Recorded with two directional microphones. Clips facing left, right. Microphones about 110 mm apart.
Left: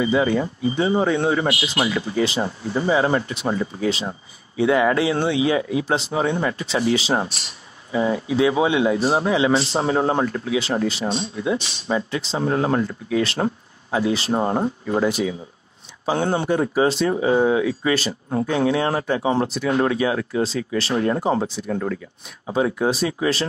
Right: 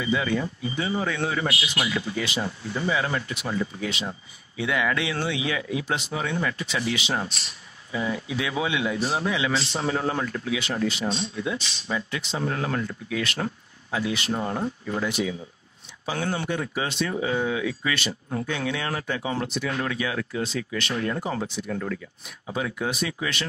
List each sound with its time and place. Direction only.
0.0 s speech: 30° left (ahead or behind)